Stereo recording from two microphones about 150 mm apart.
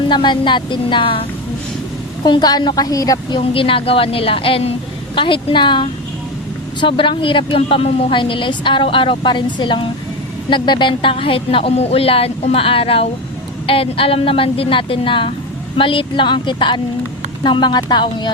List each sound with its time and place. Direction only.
0.1 s a woman's voice: 30° left (ahead or behind)
2.2 s a woman's voice: 30° left (ahead or behind)